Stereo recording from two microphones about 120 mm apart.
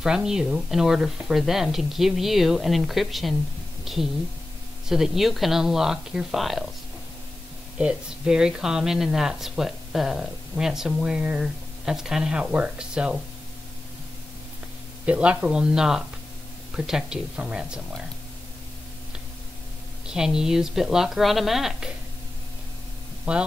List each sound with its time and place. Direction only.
0.0 s a woman's voice: 5° right (ahead or behind)
7.8 s speech: 5° right (ahead or behind)
15.0 s speech: 10° right (ahead or behind)
20.1 s speech: 5° right (ahead or behind)